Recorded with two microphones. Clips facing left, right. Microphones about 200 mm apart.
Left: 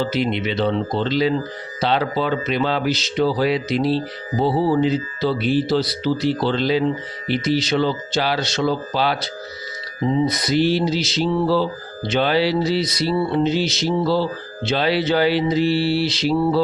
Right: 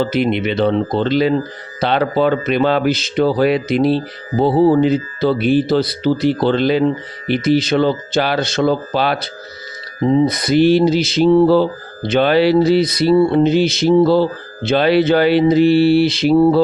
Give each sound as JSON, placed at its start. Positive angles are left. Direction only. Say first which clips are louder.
{"t": 0.0, "sound": "mantra", "louder": "right 5 dB", "side_deg": -55}